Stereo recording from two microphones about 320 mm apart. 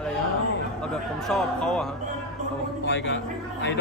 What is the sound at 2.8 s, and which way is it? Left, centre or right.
Speech, left.